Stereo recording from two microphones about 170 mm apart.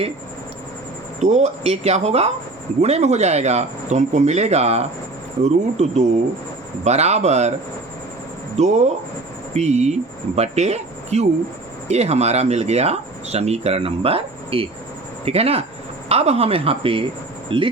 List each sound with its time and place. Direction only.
1.2 s speech: 40° right (ahead or behind)
8.5 s speech: 40° right (ahead or behind)